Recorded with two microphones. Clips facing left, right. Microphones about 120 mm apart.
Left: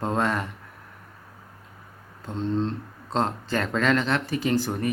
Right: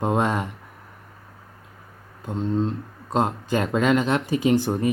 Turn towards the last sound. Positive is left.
turn(degrees=-20)  # may be behind; listen again after turning